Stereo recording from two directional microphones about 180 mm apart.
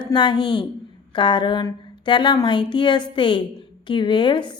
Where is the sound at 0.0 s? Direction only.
25° left (ahead or behind).